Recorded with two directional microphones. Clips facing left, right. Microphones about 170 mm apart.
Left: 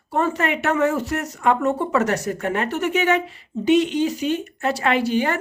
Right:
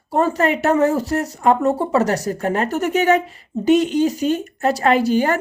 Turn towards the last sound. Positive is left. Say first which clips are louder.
# right 4 dB
turn(degrees=-40)  # may be behind; listen again after turning